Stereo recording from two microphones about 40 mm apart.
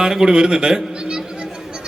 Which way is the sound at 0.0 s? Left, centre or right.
Centre.